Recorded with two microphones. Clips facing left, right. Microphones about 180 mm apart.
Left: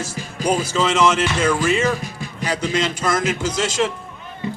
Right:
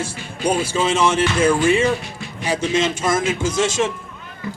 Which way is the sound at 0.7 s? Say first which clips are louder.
Left 1 dB; 30° right (ahead or behind).